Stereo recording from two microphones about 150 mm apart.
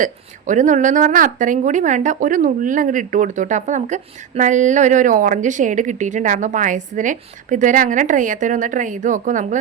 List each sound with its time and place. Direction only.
0.0 s speech: 55° right (ahead or behind)